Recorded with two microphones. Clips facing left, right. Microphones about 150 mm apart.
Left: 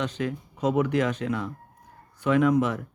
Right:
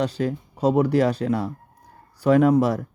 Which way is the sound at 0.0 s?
35° right (ahead or behind).